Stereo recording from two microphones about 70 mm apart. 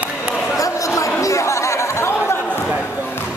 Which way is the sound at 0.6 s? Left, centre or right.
Left.